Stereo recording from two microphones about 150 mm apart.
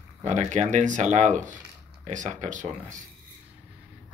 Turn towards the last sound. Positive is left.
turn(degrees=-55)  # may be behind; listen again after turning